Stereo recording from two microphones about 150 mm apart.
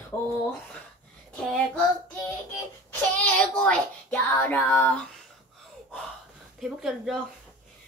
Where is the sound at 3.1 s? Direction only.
10° left (ahead or behind).